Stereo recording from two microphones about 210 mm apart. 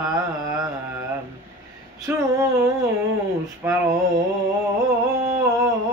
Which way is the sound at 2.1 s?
10° right (ahead or behind).